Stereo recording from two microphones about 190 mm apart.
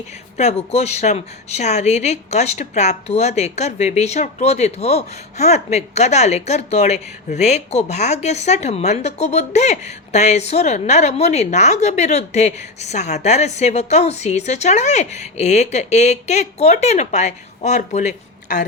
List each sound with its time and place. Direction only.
0.3 s speech: 35° left (ahead or behind)